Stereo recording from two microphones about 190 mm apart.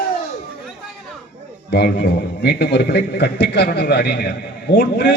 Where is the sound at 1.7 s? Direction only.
60° left (ahead or behind).